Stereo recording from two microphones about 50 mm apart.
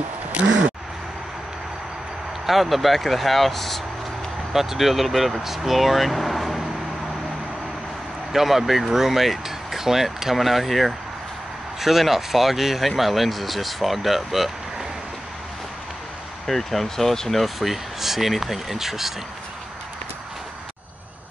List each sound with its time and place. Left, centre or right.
0.4 s speech: right
2.4 s speech: centre
4.5 s speech: centre
8.3 s speech: centre
16.4 s speech: centre